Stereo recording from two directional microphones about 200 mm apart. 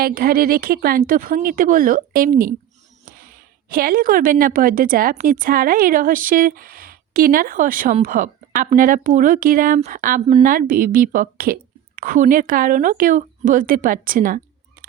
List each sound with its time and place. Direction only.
0.0 s a woman's voice: 50° right (ahead or behind)